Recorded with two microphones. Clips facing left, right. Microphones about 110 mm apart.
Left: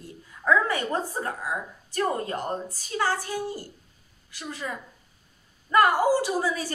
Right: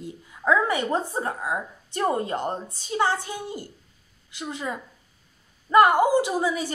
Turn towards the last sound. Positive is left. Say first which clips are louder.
# right 3 dB
turn(degrees=-20)  # may be behind; listen again after turning